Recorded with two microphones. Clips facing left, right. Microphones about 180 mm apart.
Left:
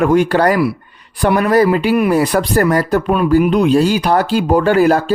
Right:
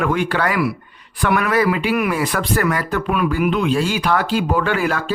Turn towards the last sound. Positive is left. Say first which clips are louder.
# left 9 dB
turn(degrees=40)  # may be behind; listen again after turning